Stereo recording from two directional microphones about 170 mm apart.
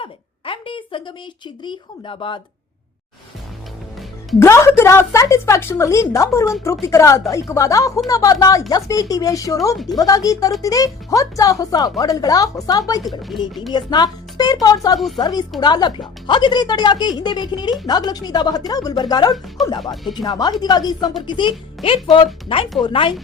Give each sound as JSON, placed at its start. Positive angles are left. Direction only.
{"t": 0.0, "sound": "a woman's voice", "side_deg": 30}
{"t": 4.4, "sound": "a woman's voice", "side_deg": 15}
{"t": 13.0, "sound": "speech", "side_deg": 0}
{"t": 13.7, "sound": "speech", "side_deg": 25}
{"t": 14.9, "sound": "speech", "side_deg": 0}
{"t": 15.2, "sound": "speech", "side_deg": 25}
{"t": 19.8, "sound": "speech", "side_deg": 0}
{"t": 20.2, "sound": "speech", "side_deg": 25}
{"t": 22.8, "sound": "speech", "side_deg": 30}